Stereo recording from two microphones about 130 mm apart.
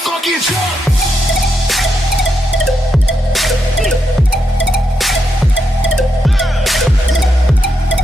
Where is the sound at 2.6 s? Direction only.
Centre (ahead or behind).